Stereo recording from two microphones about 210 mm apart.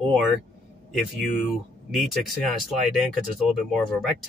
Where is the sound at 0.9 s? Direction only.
Centre (ahead or behind).